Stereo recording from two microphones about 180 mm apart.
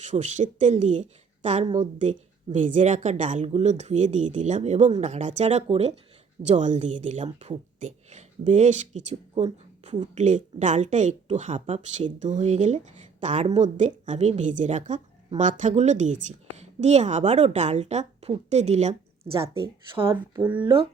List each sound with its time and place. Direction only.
0.0 s a woman's voice: 40° right (ahead or behind)
20.4 s speech: 10° right (ahead or behind)